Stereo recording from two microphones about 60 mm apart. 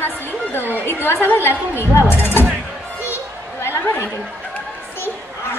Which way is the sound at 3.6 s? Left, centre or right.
Left.